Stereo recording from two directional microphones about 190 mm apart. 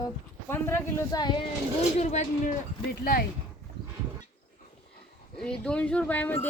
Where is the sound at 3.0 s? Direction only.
50° left (ahead or behind).